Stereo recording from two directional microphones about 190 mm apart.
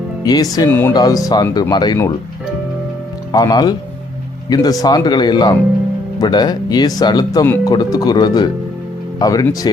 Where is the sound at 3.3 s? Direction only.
20° left (ahead or behind).